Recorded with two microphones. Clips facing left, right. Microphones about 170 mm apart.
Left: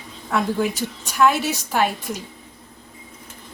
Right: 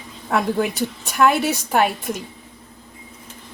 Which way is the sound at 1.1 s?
55° right (ahead or behind).